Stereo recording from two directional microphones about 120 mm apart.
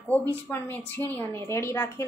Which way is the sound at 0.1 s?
15° left (ahead or behind).